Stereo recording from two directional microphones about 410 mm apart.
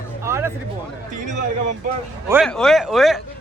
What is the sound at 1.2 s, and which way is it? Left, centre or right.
Speech, centre.